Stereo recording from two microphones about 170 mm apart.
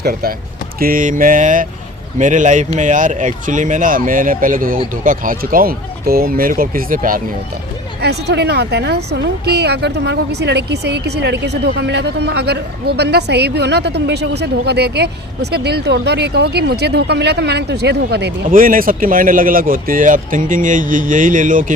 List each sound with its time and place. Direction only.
0.0 s speech: 60° right (ahead or behind)
8.0 s a woman's voice: 75° right (ahead or behind)
18.5 s speech: 55° right (ahead or behind)